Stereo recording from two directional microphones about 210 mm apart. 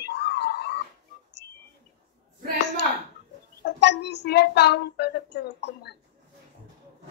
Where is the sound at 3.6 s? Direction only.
55° left (ahead or behind).